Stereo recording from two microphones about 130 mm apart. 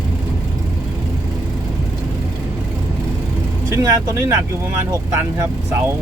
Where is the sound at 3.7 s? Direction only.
20° right (ahead or behind).